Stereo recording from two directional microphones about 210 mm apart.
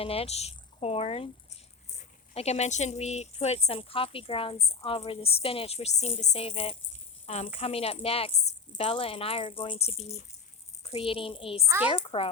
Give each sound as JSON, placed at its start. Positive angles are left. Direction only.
{"t": 0.0, "sound": "speech", "side_deg": 30}